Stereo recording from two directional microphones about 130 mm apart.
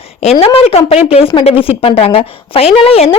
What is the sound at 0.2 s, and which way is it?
A woman's voice, 50° left (ahead or behind).